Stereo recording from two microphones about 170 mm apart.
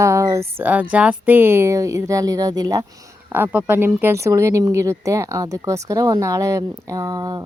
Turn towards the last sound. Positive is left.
turn(degrees=-20)  # may be behind; listen again after turning